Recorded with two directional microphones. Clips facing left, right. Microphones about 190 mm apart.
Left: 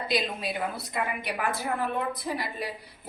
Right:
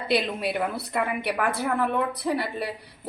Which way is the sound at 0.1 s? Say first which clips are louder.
Right 6 dB; 65° right (ahead or behind).